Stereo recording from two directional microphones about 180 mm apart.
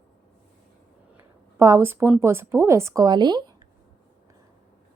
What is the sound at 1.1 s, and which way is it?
A woman's voice, 15° right (ahead or behind).